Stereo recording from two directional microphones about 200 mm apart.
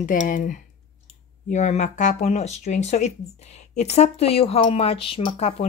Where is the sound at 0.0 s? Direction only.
40° left (ahead or behind).